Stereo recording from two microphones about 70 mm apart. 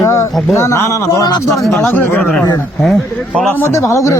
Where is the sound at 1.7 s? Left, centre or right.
Left.